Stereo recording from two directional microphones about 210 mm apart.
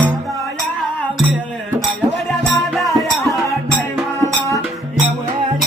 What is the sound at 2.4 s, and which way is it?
Music, centre (ahead or behind).